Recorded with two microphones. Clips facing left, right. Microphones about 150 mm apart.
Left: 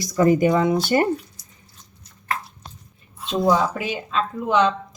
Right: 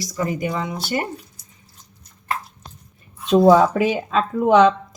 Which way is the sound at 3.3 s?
55° right (ahead or behind).